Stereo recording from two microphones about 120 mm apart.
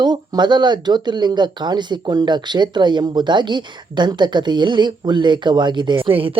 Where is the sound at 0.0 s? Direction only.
35° right (ahead or behind).